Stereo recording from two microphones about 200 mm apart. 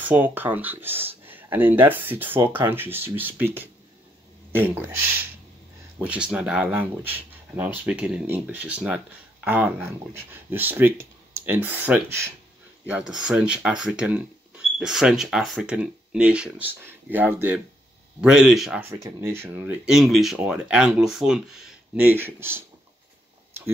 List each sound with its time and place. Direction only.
0.0 s speech: 10° right (ahead or behind)